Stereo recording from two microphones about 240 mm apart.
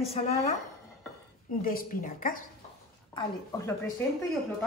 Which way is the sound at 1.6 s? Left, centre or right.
Left.